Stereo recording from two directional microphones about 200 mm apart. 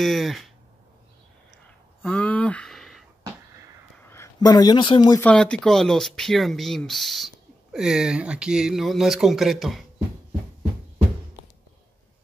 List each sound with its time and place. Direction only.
0.0 s speech: centre (ahead or behind)
2.0 s a sound: 5° left (ahead or behind)
4.0 s speech: 15° left (ahead or behind)
5.2 s speech: 5° left (ahead or behind)